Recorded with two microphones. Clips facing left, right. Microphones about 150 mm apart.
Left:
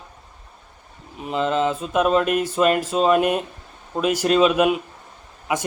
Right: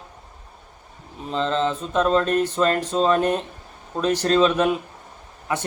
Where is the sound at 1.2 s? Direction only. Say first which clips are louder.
Left 1 dB; 15° left (ahead or behind).